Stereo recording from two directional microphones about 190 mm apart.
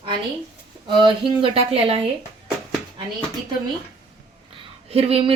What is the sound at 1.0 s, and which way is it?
Speech, 25° right (ahead or behind).